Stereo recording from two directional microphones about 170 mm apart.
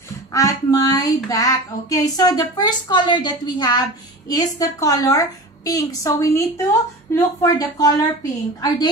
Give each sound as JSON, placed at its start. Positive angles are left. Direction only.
{"t": 0.3, "sound": "child singing", "side_deg": 20}